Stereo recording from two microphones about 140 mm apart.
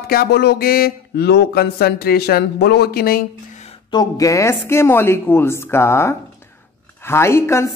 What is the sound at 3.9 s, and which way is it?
Speech, 25° left (ahead or behind).